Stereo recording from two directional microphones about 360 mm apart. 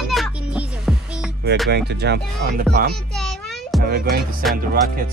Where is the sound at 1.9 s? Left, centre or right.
Right.